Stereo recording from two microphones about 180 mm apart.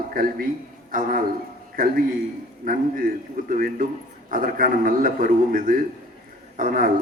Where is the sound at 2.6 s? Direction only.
50° right (ahead or behind).